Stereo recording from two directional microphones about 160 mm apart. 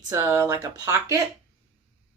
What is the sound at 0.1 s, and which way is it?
Speech, 15° right (ahead or behind).